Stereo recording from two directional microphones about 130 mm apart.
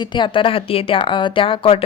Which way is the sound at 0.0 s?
35° left (ahead or behind).